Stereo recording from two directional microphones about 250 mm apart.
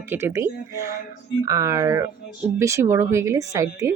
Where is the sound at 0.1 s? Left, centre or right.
Centre.